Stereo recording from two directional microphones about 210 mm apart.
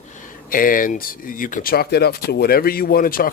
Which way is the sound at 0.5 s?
40° left (ahead or behind).